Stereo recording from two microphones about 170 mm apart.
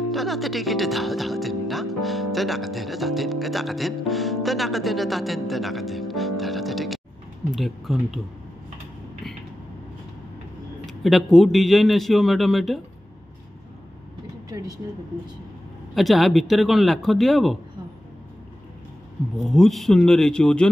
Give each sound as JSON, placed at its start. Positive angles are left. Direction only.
{"t": 0.1, "sound": "a man's voice", "side_deg": 0}
{"t": 10.9, "sound": "a man's voice", "side_deg": 0}
{"t": 14.8, "sound": "speech", "side_deg": -20}
{"t": 15.9, "sound": "a man's voice", "side_deg": 0}
{"t": 19.3, "sound": "a man's voice", "side_deg": 0}